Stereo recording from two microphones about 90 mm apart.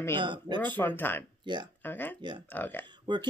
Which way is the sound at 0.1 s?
60° right (ahead or behind).